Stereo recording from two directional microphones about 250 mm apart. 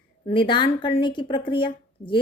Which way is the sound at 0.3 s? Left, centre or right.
Centre.